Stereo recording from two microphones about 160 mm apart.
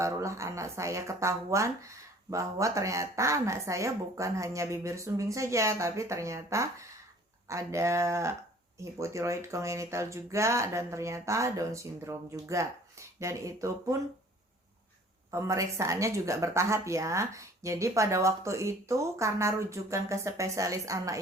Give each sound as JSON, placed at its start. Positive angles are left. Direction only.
{"t": 0.0, "sound": "speech", "side_deg": -20}
{"t": 15.3, "sound": "speech", "side_deg": -20}